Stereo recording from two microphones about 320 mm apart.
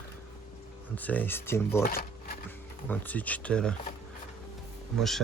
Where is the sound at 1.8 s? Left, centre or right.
Left.